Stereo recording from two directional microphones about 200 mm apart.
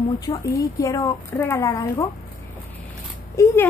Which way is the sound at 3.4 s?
15° left (ahead or behind).